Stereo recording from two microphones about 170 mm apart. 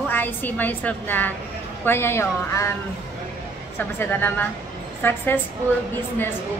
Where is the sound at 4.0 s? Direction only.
10° left (ahead or behind).